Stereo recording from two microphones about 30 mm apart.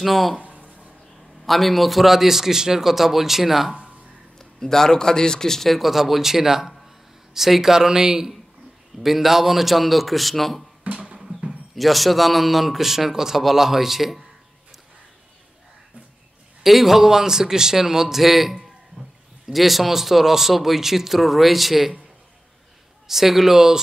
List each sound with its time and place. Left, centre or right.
0.0 s a man's voice: centre
0.4 s a sound: right
1.4 s a man's voice: centre
4.4 s a man's voice: centre
5.7 s a man's voice: centre
9.0 s a man's voice: centre
10.9 s music: right
11.7 s a man's voice: centre
16.6 s a man's voice: centre
23.0 s a man's voice: centre